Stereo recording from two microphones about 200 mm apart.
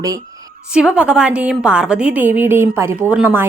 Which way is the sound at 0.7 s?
5° right (ahead or behind).